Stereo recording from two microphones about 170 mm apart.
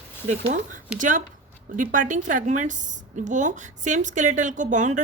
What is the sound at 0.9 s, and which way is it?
A woman's voice, 50° right (ahead or behind).